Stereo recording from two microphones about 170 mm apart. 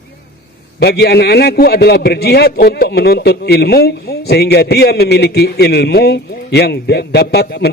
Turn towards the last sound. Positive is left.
turn(degrees=70)  # may be behind; listen again after turning